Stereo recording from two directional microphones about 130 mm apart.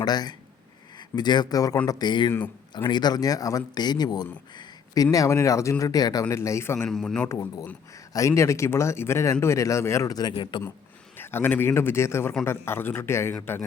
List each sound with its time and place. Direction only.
0.0 s speech: 30° left (ahead or behind)
6.8 s a man's voice: 5° left (ahead or behind)
7.3 s speech: 25° left (ahead or behind)
11.2 s a man's voice: 15° left (ahead or behind)